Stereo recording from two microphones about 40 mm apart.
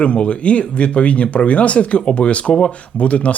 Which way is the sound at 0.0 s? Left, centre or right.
Left.